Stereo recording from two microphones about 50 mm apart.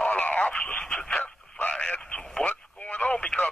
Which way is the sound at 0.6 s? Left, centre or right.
Centre.